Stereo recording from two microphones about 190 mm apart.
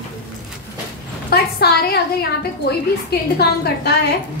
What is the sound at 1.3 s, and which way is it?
A woman's voice, 55° left (ahead or behind).